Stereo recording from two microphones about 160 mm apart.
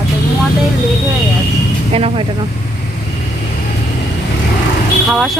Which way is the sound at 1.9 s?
40° right (ahead or behind).